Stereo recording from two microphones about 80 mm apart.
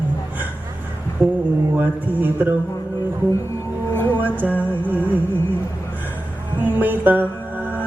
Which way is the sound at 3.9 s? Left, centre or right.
Left.